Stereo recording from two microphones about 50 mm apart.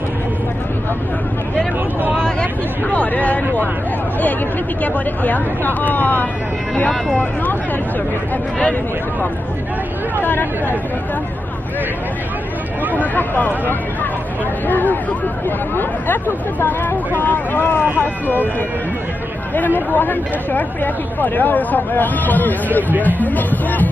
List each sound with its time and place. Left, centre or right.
2.9 s a sound: left
4.8 s speech: left
12.9 s speech: left
19.5 s speech: left